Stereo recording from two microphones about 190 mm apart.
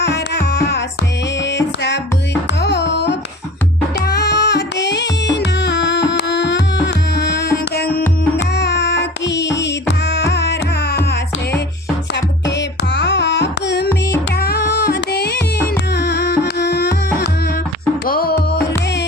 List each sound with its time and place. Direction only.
0.0 s music: 60° left (ahead or behind)
2.6 s music: 60° left (ahead or behind)
8.4 s music: 65° left (ahead or behind)
14.3 s child singing: 55° left (ahead or behind)
16.0 s music: 60° left (ahead or behind)